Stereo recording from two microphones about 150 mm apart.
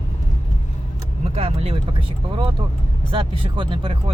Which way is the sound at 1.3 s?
40° right (ahead or behind).